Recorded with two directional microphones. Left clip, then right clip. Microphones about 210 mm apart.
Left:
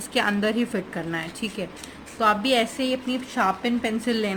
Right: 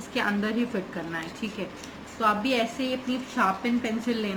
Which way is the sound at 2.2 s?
55° left (ahead or behind).